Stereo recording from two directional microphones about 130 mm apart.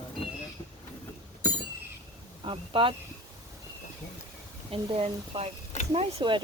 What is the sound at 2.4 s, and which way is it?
Speech, 40° right (ahead or behind).